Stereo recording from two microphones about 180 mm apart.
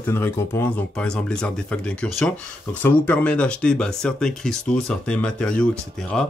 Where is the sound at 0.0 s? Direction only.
15° left (ahead or behind).